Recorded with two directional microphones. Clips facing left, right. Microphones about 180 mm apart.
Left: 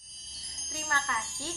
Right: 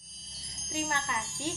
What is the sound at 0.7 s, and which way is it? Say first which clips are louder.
Speech: right 2 dB; 20° right (ahead or behind).